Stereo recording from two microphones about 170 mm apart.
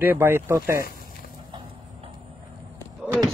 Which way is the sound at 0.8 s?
55° left (ahead or behind).